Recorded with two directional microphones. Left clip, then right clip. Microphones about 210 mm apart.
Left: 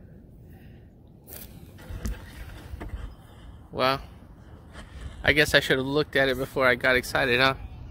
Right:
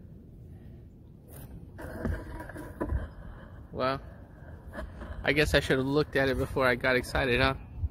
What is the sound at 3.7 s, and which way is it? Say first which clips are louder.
Speech: left 6 dB; 40° left (ahead or behind).